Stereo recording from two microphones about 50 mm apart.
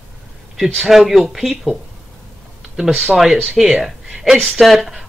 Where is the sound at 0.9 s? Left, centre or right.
Centre.